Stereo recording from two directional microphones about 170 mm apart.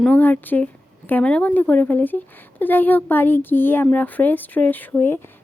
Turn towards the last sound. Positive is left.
turn(degrees=15)  # may be behind; listen again after turning